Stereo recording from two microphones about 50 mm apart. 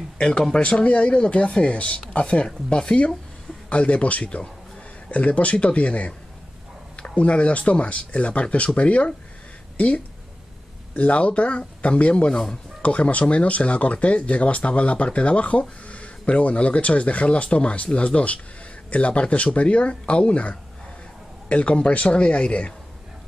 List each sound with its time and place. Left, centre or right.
0.2 s speech: centre
7.2 s speech: left
12.3 s speech: centre
12.8 s speech: left